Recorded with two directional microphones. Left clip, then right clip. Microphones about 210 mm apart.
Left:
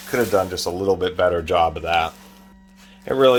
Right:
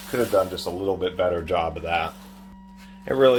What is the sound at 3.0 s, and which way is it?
Speech, 25° left (ahead or behind).